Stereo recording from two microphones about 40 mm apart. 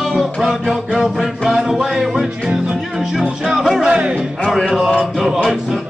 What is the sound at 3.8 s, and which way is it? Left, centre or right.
Music, right.